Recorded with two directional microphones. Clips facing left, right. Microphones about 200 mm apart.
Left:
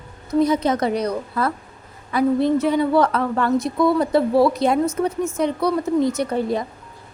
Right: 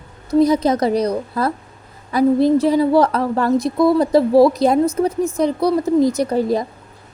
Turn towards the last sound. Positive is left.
turn(degrees=-35)  # may be behind; listen again after turning